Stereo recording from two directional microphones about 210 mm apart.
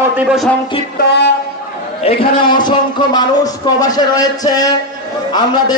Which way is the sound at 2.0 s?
25° left (ahead or behind).